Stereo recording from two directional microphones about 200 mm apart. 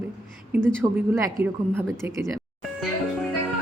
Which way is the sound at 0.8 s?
15° right (ahead or behind).